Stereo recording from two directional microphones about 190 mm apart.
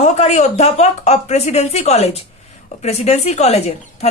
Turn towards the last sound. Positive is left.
turn(degrees=35)  # may be behind; listen again after turning